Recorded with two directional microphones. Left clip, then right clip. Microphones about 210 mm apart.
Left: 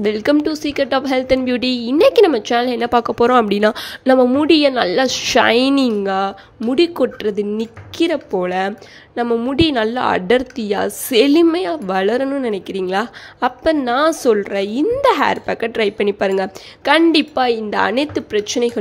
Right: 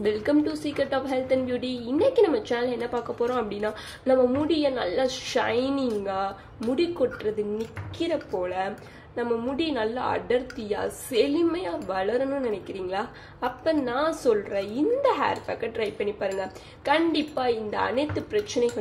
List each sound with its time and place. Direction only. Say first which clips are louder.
0.0 s speech: left 8 dB; 40° left (ahead or behind)